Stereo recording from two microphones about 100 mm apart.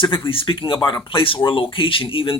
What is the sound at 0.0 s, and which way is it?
Speech, 60° left (ahead or behind).